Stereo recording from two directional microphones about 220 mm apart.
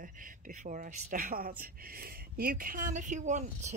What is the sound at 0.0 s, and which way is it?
Speech, 40° right (ahead or behind).